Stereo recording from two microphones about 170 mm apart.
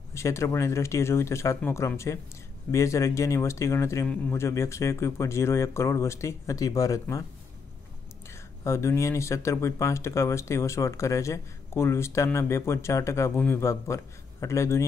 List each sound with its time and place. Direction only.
0.1 s speech: 15° left (ahead or behind)
8.6 s speech: 15° left (ahead or behind)